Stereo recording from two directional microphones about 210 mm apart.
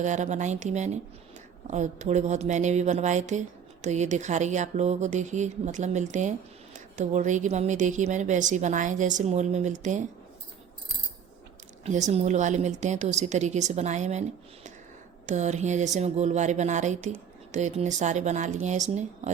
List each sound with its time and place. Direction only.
0.0 s a woman's voice: 35° right (ahead or behind)
11.9 s a woman's voice: 35° right (ahead or behind)